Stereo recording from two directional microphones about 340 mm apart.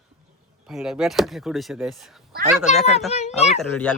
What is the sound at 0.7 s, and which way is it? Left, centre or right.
Speech, centre.